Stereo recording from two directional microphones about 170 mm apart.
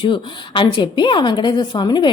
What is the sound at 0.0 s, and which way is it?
Speech, 30° left (ahead or behind).